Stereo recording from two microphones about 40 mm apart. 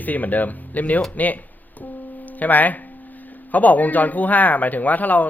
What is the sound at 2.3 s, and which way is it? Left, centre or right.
Speech, left.